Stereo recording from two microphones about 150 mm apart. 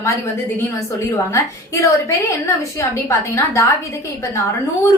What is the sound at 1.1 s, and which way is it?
A woman's voice, 20° left (ahead or behind).